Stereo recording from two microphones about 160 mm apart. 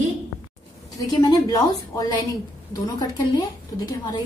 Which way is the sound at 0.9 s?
25° left (ahead or behind).